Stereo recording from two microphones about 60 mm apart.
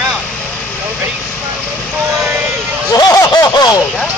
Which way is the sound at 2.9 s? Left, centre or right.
Left.